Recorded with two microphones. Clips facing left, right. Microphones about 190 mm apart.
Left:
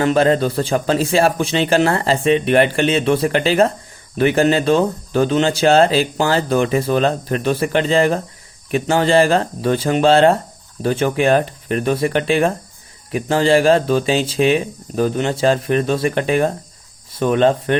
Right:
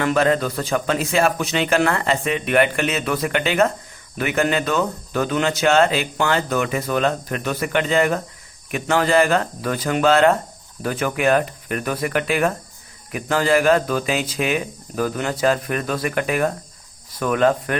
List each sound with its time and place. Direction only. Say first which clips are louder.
0.0 s a man's voice: left 4 dB; 30° left (ahead or behind)